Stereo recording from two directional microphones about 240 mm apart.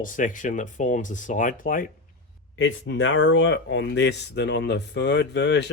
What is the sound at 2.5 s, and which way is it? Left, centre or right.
Speech, left.